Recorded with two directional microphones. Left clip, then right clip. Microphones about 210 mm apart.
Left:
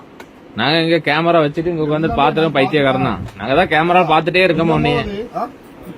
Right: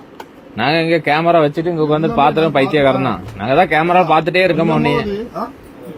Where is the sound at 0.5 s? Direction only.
Centre (ahead or behind).